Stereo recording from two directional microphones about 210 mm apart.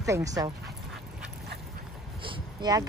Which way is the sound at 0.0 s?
15° right (ahead or behind).